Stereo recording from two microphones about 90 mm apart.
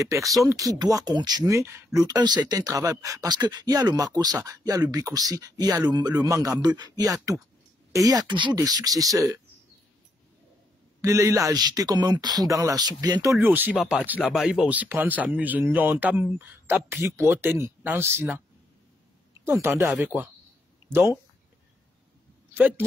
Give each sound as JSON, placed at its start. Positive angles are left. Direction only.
{"t": 0.0, "sound": "a man's voice", "side_deg": -35}
{"t": 1.5, "sound": "a man's voice", "side_deg": -35}
{"t": 2.0, "sound": "speech", "side_deg": -45}
{"t": 3.8, "sound": "a man's voice", "side_deg": -45}
{"t": 6.6, "sound": "speech", "side_deg": -50}
{"t": 8.5, "sound": "a man's voice", "side_deg": -45}
{"t": 11.0, "sound": "speech", "side_deg": -35}
{"t": 13.4, "sound": "speech", "side_deg": -20}
{"t": 19.4, "sound": "speech", "side_deg": -30}
{"t": 19.9, "sound": "speech", "side_deg": -20}
{"t": 20.9, "sound": "speech", "side_deg": -30}
{"t": 22.5, "sound": "a man's voice", "side_deg": -25}